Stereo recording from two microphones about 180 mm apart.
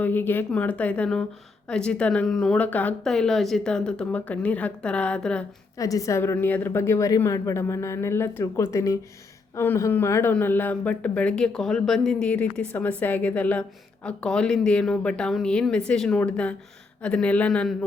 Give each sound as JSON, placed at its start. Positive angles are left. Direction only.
{"t": 0.0, "sound": "speech", "side_deg": 10}
{"t": 5.7, "sound": "speech", "side_deg": 20}